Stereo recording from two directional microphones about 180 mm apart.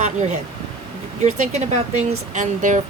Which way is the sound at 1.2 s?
40° right (ahead or behind).